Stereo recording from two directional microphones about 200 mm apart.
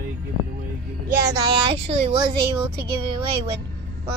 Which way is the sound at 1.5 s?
25° right (ahead or behind).